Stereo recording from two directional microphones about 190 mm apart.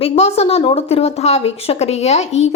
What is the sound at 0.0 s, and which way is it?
A woman's voice, 35° left (ahead or behind).